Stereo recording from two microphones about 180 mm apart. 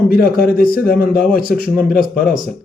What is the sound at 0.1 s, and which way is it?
A man's voice, 55° left (ahead or behind).